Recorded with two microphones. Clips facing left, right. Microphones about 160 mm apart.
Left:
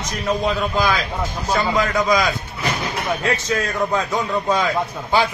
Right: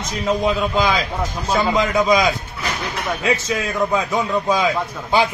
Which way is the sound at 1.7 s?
20° right (ahead or behind).